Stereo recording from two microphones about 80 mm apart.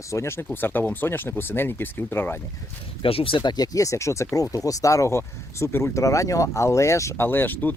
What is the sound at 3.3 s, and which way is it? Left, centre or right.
Speech, left.